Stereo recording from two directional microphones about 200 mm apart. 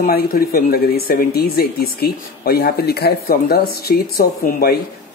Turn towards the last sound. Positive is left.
turn(degrees=50)  # may be behind; listen again after turning